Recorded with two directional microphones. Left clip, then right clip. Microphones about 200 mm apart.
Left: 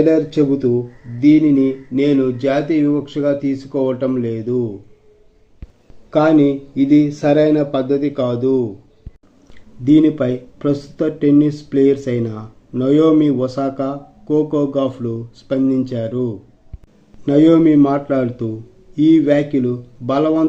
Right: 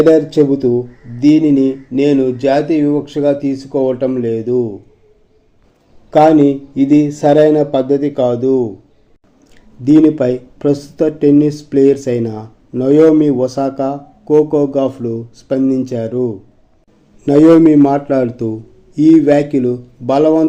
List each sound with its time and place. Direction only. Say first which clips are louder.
0.1 s speech: right 5 dB; 20° right (ahead or behind)
6.1 s speech: right 5 dB; 15° right (ahead or behind)
9.8 s speech: right 4 dB; 10° right (ahead or behind)